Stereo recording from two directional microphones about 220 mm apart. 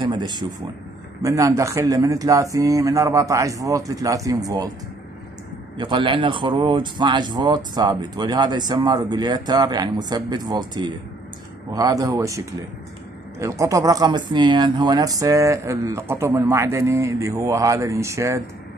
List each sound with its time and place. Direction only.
0.0 s speech: 20° right (ahead or behind)
5.8 s speech: 20° right (ahead or behind)